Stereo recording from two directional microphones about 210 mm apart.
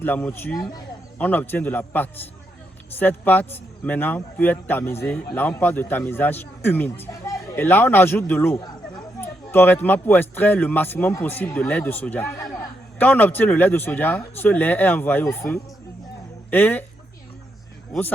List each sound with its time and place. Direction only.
0.0 s speech: 10° left (ahead or behind)
8.5 s a sound: 20° left (ahead or behind)
9.2 s speech: 10° left (ahead or behind)